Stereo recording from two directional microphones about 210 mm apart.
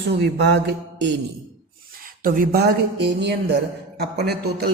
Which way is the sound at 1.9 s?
45° right (ahead or behind).